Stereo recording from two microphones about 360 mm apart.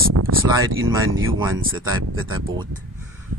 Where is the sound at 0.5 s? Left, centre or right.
Centre.